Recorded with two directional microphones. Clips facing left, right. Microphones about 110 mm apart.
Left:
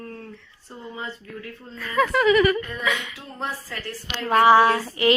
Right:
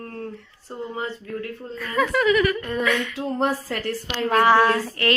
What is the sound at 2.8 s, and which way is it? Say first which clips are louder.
Speech: right 4 dB; 15° left (ahead or behind).